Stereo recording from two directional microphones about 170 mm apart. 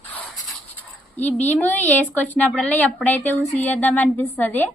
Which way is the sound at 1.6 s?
10° left (ahead or behind).